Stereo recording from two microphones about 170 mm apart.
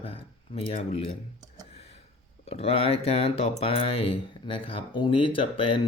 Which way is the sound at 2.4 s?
35° left (ahead or behind).